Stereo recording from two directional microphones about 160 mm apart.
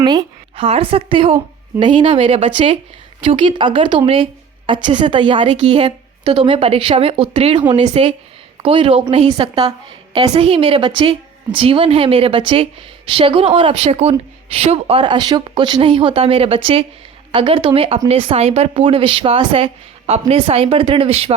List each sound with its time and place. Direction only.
0.0 s a woman's voice: 25° right (ahead or behind)